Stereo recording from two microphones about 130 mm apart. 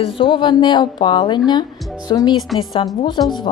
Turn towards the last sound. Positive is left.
turn(degrees=40)  # may be behind; listen again after turning